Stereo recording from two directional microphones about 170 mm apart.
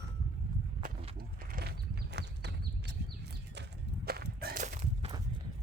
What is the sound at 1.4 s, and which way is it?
Horse, 60° right (ahead or behind).